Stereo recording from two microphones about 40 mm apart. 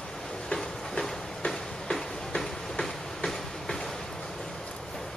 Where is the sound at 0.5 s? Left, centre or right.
Centre.